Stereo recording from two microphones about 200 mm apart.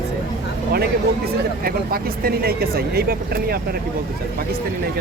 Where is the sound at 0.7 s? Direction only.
50° right (ahead or behind).